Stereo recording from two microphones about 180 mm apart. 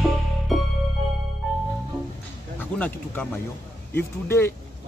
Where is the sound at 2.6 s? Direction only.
10° left (ahead or behind).